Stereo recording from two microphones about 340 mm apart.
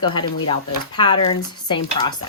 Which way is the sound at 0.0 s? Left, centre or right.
Centre.